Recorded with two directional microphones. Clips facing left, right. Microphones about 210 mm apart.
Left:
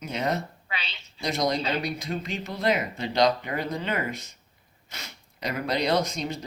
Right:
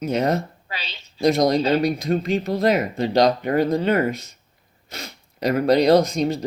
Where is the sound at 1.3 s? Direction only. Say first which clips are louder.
Right 5 dB; 40° right (ahead or behind).